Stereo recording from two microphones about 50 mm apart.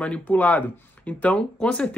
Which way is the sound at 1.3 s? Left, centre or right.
Left.